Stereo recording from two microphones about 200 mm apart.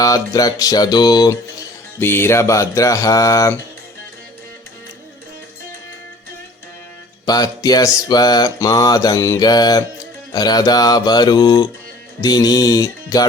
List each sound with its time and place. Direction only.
0.0 s mantra: 20° left (ahead or behind)
2.0 s music: 10° left (ahead or behind)
7.3 s mantra: 20° left (ahead or behind)